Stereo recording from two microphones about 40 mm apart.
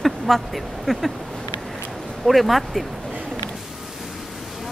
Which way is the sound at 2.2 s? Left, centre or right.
Centre.